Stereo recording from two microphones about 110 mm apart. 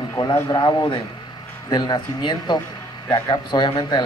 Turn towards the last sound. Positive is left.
turn(degrees=40)  # may be behind; listen again after turning